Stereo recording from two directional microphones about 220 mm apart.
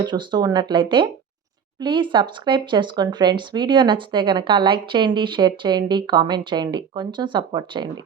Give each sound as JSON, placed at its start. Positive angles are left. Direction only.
{"t": 0.0, "sound": "speech", "side_deg": -20}